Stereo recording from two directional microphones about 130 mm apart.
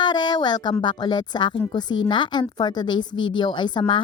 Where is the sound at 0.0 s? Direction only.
35° left (ahead or behind).